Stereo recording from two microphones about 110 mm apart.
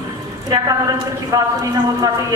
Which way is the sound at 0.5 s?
35° right (ahead or behind).